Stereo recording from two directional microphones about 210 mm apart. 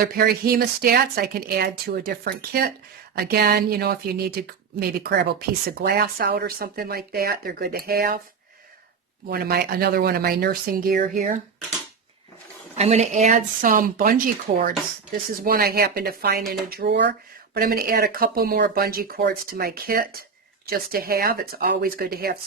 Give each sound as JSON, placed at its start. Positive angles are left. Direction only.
{"t": 0.0, "sound": "speech", "side_deg": -45}
{"t": 9.3, "sound": "speech", "side_deg": -45}
{"t": 12.7, "sound": "speech", "side_deg": -30}